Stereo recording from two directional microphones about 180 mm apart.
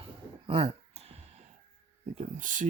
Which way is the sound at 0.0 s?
30° right (ahead or behind).